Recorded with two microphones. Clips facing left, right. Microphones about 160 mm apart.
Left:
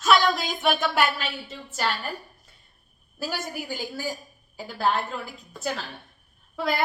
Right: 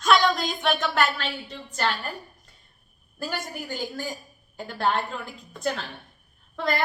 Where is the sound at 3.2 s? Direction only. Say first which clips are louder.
Left 1 dB; 5° left (ahead or behind).